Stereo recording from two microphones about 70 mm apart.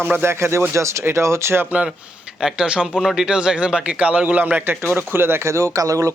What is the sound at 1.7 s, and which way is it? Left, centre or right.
A man's voice, centre.